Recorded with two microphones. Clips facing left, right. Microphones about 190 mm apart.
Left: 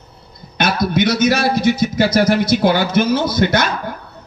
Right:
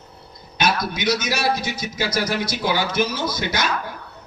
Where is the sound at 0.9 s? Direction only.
55° left (ahead or behind).